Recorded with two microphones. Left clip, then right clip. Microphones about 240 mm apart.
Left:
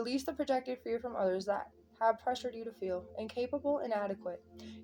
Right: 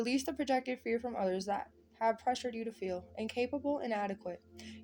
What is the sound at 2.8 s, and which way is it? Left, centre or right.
Speech, right.